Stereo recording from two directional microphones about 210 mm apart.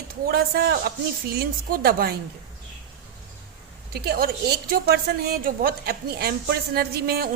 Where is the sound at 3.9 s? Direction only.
50° right (ahead or behind).